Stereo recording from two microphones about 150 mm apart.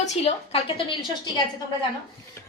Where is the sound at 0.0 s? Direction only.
45° left (ahead or behind).